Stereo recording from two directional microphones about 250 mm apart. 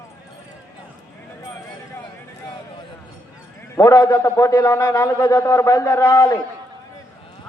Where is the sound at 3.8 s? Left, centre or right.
Centre.